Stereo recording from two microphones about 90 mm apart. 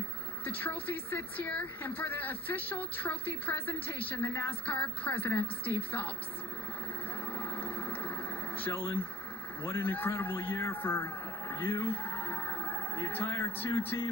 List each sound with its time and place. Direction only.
0.7 s speech: 20° left (ahead or behind)
7.3 s vehicle: 20° left (ahead or behind)
8.5 s speech: 20° left (ahead or behind)
11.5 s a sound: 25° left (ahead or behind)
13.8 s speech: 25° left (ahead or behind)